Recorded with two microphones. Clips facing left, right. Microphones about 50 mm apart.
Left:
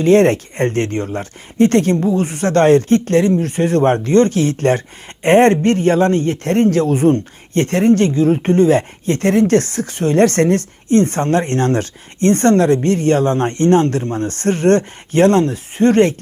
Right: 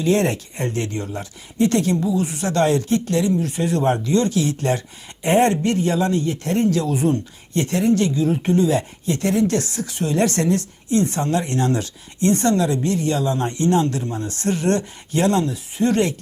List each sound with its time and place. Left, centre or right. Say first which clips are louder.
0.0 s speech: left 8 dB; left